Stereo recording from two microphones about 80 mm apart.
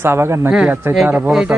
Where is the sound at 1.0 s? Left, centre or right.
Right.